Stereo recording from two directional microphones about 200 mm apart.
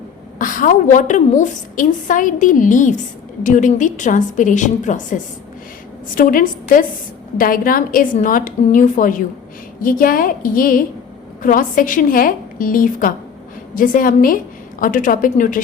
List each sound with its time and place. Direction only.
0.3 s a woman's voice: 40° left (ahead or behind)